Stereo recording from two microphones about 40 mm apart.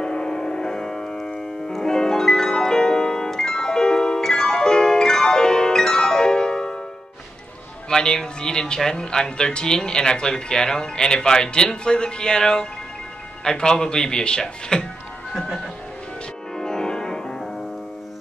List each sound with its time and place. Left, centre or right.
0.0 s music: centre
7.9 s speech: centre
16.5 s music: centre